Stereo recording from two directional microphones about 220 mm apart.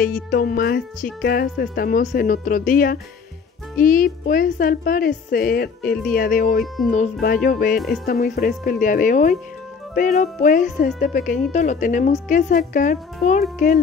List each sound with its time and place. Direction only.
0.0 s speech: 40° left (ahead or behind)